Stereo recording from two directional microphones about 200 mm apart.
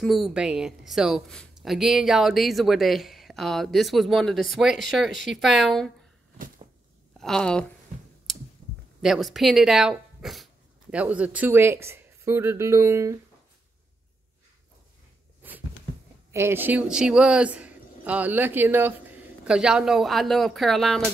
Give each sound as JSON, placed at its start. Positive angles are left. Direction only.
{"t": 0.0, "sound": "speech", "side_deg": 0}
{"t": 7.2, "sound": "speech", "side_deg": 5}
{"t": 8.3, "sound": "a sound", "side_deg": 0}
{"t": 9.0, "sound": "speech", "side_deg": 0}
{"t": 16.3, "sound": "speech", "side_deg": -10}